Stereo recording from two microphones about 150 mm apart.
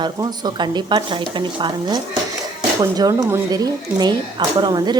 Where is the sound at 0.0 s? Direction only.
25° right (ahead or behind).